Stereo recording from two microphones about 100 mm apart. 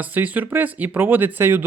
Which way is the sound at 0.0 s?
15° right (ahead or behind).